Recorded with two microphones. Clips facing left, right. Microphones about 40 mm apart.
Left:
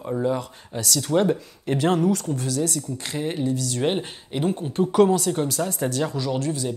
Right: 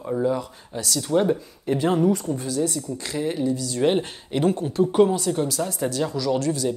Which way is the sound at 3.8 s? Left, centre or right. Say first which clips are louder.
Right 6 dB; centre.